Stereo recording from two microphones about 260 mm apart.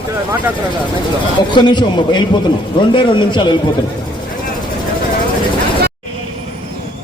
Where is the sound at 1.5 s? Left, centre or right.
Centre.